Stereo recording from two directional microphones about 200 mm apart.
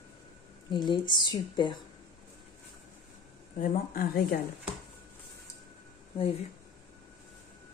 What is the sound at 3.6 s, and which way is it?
Speech, 45° left (ahead or behind).